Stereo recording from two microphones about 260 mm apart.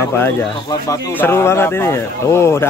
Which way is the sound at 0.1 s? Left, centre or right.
Centre.